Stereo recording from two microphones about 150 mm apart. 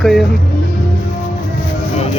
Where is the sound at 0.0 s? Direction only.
Centre (ahead or behind).